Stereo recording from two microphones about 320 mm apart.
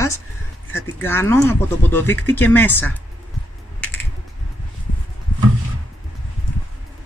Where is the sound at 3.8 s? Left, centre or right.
Centre.